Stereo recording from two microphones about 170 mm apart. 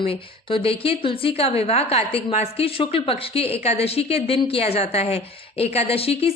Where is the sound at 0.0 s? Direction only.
30° left (ahead or behind).